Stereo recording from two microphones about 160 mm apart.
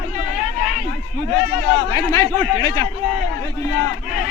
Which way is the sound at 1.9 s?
20° left (ahead or behind).